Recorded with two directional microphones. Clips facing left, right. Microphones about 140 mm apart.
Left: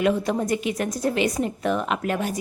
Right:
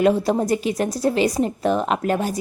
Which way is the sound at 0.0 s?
35° right (ahead or behind).